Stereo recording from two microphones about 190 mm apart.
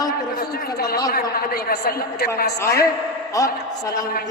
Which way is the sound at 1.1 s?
50° left (ahead or behind).